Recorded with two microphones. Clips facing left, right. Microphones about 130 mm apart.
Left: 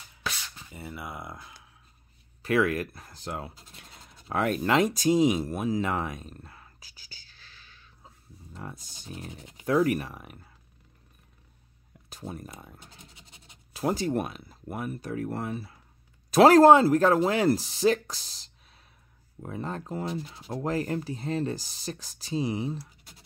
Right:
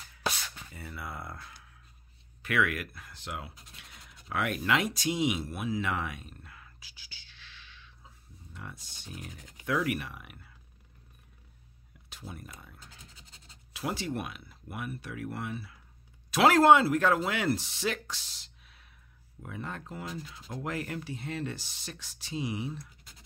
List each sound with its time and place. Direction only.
0.7 s speech: 20° left (ahead or behind)
2.4 s speech: 35° left (ahead or behind)
9.1 s speech: 25° left (ahead or behind)
12.1 s a sound: 40° left (ahead or behind)
12.4 s scratch: 30° left (ahead or behind)
13.7 s speech: 40° left (ahead or behind)